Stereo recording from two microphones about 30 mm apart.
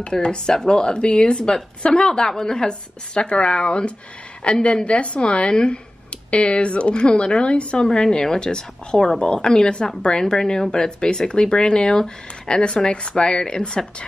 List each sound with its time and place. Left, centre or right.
0.0 s speech: left
3.2 s a woman's voice: left
5.5 s speech: left
6.3 s a woman's voice: left